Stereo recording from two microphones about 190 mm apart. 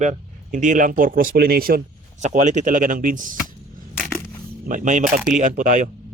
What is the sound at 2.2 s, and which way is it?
Speech, 40° right (ahead or behind).